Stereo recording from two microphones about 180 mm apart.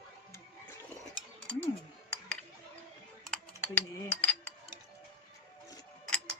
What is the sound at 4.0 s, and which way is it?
Speech, 10° left (ahead or behind).